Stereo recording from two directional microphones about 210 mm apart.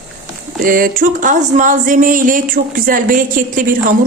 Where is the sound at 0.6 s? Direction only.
40° right (ahead or behind).